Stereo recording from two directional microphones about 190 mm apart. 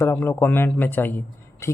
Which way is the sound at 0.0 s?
10° left (ahead or behind).